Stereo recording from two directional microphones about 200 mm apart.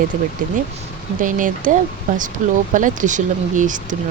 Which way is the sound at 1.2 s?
40° right (ahead or behind).